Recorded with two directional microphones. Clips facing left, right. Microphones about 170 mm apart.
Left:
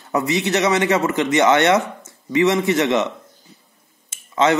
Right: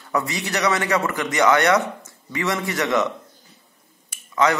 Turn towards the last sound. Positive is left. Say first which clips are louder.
# left 2 dB
turn(degrees=25)  # may be behind; listen again after turning